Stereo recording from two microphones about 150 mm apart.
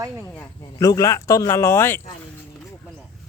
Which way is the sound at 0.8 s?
20° left (ahead or behind).